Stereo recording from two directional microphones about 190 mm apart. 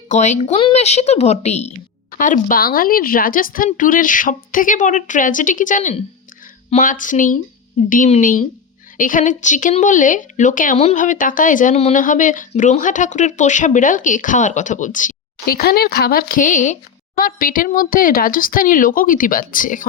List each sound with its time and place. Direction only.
0.1 s speech: 40° left (ahead or behind)